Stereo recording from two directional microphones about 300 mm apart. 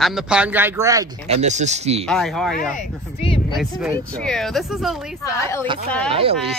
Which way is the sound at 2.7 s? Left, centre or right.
Centre.